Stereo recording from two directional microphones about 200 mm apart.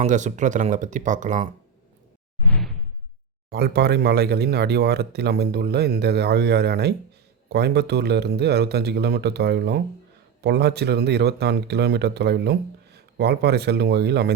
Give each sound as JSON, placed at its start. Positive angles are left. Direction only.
{"t": 0.0, "sound": "speech", "side_deg": -40}
{"t": 2.5, "sound": "whoosh", "side_deg": 0}
{"t": 3.5, "sound": "speech", "side_deg": -55}